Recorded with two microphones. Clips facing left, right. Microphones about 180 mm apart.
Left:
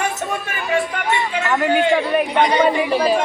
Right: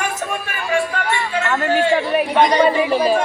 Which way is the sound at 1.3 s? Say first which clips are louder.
Even; 15° left (ahead or behind).